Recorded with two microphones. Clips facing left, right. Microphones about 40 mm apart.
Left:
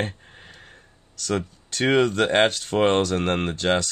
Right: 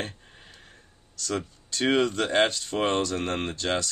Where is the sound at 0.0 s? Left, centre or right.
Left.